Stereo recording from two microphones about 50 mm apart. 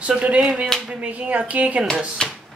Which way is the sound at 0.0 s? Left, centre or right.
Right.